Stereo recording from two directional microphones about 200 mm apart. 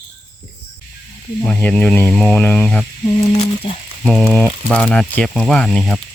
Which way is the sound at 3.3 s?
30° left (ahead or behind).